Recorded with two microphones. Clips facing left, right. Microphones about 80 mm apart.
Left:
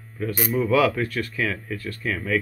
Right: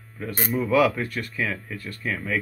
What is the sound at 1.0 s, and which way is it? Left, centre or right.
Speech, centre.